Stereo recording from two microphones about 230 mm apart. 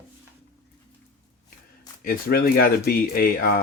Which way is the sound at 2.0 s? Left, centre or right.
Left.